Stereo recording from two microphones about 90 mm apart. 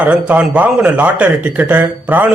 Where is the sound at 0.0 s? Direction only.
15° right (ahead or behind).